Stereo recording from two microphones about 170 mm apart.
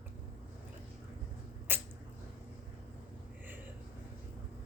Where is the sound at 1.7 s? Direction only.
10° right (ahead or behind).